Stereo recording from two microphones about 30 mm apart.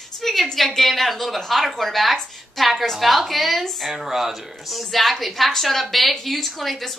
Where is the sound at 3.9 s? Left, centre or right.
Centre.